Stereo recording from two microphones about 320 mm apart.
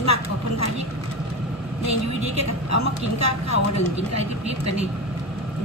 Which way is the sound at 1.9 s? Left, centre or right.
Left.